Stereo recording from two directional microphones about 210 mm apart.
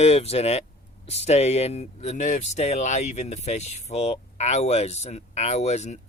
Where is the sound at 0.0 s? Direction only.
30° left (ahead or behind).